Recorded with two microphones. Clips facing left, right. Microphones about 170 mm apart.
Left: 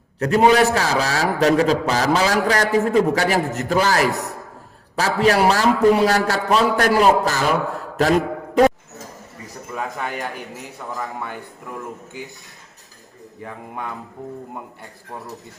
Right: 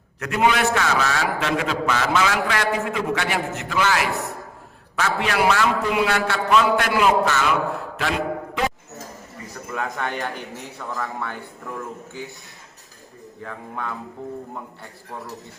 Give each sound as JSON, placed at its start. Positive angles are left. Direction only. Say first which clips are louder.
{"t": 0.2, "sound": "a man's voice", "louder": "left 6 dB", "side_deg": 35}
{"t": 7.9, "sound": "a sound", "louder": "left 9 dB", "side_deg": 40}
{"t": 9.7, "sound": "speech", "louder": "even", "side_deg": 5}
{"t": 13.4, "sound": "speech", "louder": "even", "side_deg": 20}